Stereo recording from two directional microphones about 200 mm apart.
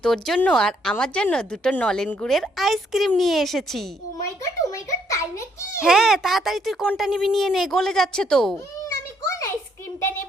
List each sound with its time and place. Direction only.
0.0 s speech: 5° left (ahead or behind)
4.3 s a sound: 15° left (ahead or behind)
5.8 s speech: centre (ahead or behind)